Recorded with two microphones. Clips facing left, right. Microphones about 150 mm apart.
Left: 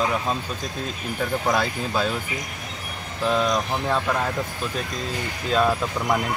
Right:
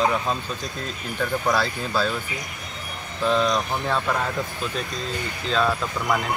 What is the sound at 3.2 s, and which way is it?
Speech, 5° left (ahead or behind).